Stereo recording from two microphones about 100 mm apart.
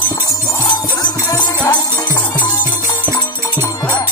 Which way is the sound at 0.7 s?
45° left (ahead or behind).